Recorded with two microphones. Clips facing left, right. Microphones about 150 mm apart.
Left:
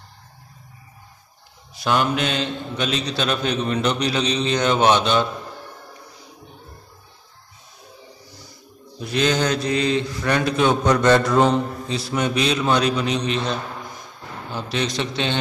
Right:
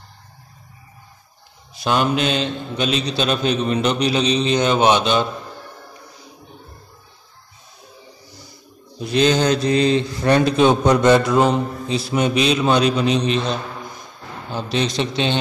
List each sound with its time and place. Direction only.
1.8 s a man's voice: 20° right (ahead or behind)
9.0 s a man's voice: 25° right (ahead or behind)
11.0 s mantra: 10° right (ahead or behind)
11.9 s a man's voice: 20° right (ahead or behind)